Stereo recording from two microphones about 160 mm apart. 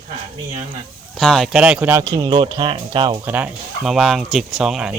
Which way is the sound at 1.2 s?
5° left (ahead or behind).